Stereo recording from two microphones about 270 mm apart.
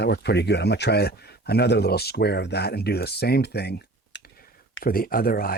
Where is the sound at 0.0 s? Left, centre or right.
Left.